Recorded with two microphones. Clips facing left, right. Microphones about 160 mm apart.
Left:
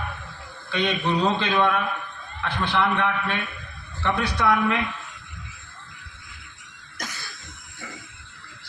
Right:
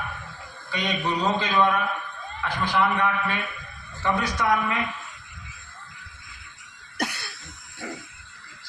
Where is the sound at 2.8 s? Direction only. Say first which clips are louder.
Even; 70° left (ahead or behind).